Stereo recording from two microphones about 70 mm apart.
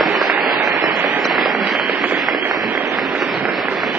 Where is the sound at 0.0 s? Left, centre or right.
Centre.